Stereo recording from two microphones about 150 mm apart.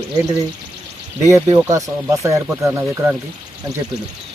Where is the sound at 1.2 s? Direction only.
20° right (ahead or behind).